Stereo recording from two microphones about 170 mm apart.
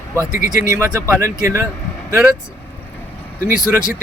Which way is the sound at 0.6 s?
15° right (ahead or behind).